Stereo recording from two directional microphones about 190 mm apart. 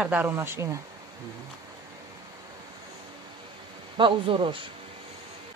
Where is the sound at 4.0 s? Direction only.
25° right (ahead or behind).